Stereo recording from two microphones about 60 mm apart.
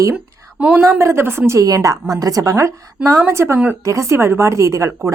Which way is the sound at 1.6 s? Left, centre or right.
Right.